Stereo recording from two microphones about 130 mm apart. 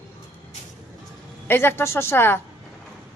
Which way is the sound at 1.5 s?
15° left (ahead or behind).